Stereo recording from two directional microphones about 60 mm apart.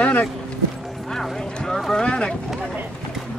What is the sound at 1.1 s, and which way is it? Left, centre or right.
Clip-clop, centre.